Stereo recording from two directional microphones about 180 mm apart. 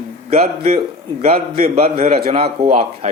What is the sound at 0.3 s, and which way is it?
Speech, 35° right (ahead or behind).